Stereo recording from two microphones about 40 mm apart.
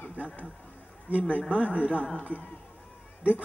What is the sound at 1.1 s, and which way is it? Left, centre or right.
Speech, right.